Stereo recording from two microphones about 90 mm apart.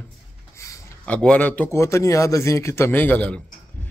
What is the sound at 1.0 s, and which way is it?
Speech, 15° left (ahead or behind).